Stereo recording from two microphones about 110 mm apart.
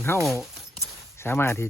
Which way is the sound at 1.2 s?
20° left (ahead or behind).